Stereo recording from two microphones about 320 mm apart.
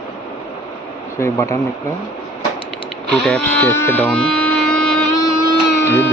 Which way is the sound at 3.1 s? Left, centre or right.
Centre.